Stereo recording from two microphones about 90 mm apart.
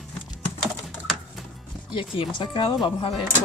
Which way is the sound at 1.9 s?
70° left (ahead or behind).